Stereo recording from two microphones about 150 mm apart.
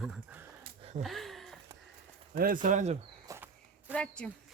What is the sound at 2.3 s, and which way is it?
Speech, 65° right (ahead or behind).